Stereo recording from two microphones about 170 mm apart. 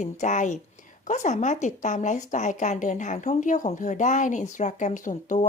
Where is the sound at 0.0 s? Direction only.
45° left (ahead or behind).